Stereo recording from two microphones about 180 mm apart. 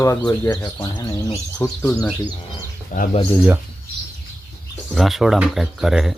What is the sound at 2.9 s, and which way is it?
Speech, 45° left (ahead or behind).